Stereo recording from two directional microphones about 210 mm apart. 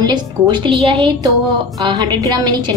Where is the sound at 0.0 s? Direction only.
20° right (ahead or behind).